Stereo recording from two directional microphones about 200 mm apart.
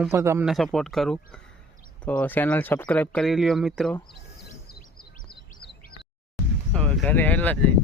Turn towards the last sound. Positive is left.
turn(degrees=5)  # may be behind; listen again after turning